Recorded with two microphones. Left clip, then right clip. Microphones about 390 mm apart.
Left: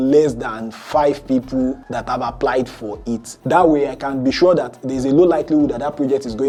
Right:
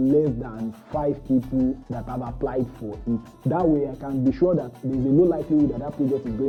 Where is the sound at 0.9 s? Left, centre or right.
Centre.